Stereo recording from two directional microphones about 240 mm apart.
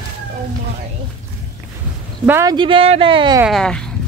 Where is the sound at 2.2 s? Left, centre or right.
Centre.